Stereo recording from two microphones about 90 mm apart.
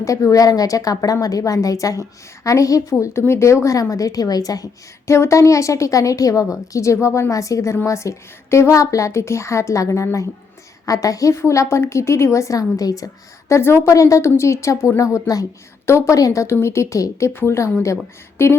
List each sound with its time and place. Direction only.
0.0 s a woman's voice: 35° left (ahead or behind)
13.5 s a woman's voice: 25° left (ahead or behind)